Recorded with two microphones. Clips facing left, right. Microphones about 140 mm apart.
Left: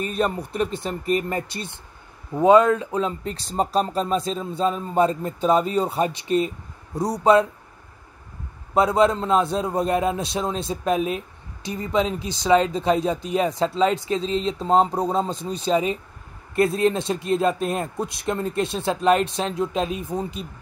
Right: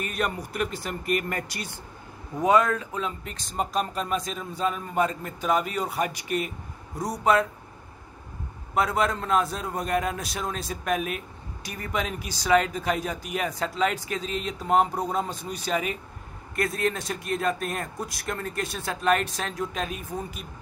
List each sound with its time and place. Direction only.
0.1 s a man's voice: 25° left (ahead or behind)
8.7 s a man's voice: 25° left (ahead or behind)